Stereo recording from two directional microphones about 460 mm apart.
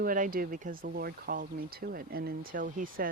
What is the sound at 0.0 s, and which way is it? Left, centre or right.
Speech, centre.